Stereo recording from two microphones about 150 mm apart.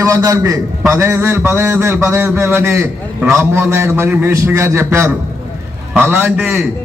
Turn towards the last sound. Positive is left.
turn(degrees=-10)  # may be behind; listen again after turning